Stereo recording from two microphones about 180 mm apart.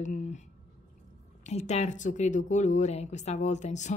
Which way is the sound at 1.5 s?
35° left (ahead or behind).